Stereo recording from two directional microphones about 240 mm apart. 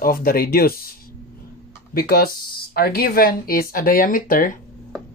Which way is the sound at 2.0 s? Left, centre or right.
Left.